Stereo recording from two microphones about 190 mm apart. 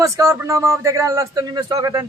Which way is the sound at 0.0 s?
15° right (ahead or behind).